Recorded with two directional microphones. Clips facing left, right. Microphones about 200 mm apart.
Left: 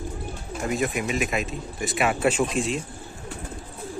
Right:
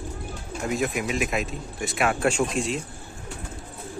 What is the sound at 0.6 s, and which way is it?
Speech, centre (ahead or behind).